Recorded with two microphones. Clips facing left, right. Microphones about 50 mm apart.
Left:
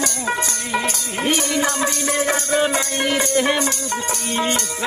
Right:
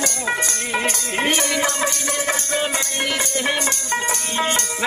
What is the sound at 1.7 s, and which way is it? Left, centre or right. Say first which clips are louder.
Music: left 2 dB; centre.